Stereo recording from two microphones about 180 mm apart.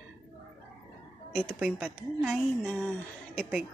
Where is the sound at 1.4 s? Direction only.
Centre (ahead or behind).